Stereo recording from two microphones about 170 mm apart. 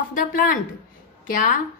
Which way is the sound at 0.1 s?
50° left (ahead or behind).